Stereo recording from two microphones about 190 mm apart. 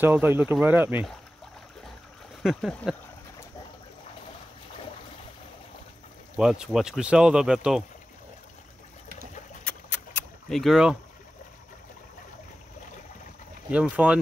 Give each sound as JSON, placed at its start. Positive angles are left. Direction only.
{"t": 0.0, "sound": "speech", "side_deg": -10}
{"t": 2.4, "sound": "speech", "side_deg": 0}
{"t": 6.3, "sound": "speech", "side_deg": -5}
{"t": 9.7, "sound": "keys jangling", "side_deg": 10}
{"t": 13.7, "sound": "speech", "side_deg": -5}